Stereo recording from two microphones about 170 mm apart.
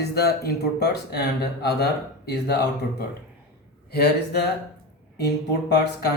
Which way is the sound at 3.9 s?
70° left (ahead or behind).